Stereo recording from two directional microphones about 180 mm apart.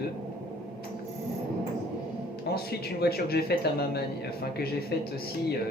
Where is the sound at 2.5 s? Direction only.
60° left (ahead or behind).